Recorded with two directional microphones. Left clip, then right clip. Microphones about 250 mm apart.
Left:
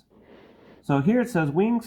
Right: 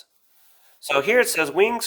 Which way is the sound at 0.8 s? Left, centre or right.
Right.